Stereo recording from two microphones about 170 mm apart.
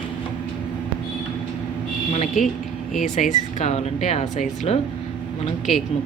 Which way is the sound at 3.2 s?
45° left (ahead or behind).